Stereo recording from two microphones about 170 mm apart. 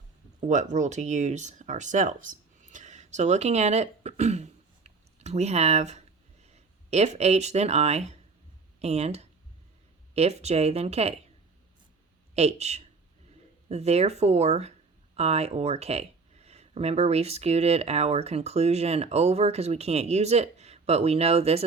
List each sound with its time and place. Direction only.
0.3 s speech: 45° right (ahead or behind)
12.3 s speech: 40° right (ahead or behind)